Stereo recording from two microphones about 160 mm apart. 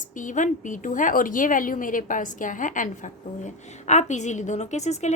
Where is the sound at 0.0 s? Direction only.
55° left (ahead or behind).